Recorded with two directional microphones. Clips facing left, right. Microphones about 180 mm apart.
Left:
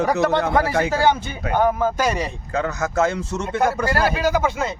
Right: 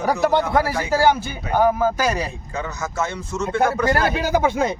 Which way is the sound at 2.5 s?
60° left (ahead or behind).